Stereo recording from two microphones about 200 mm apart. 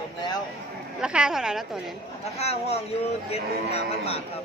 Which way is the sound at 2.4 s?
30° left (ahead or behind).